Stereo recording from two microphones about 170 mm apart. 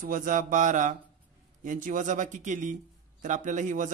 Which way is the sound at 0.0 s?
50° right (ahead or behind).